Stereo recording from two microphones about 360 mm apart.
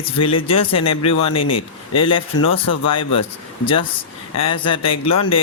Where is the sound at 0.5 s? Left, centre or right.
Left.